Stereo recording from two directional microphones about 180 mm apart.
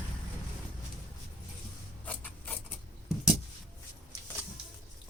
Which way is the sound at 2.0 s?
10° left (ahead or behind).